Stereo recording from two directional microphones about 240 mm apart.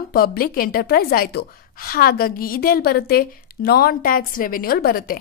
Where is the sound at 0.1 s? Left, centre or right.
Left.